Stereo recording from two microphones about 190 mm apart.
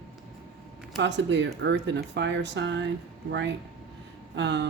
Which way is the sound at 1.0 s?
70° right (ahead or behind).